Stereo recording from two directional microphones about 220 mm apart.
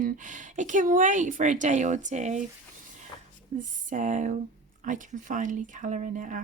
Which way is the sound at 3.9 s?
35° right (ahead or behind).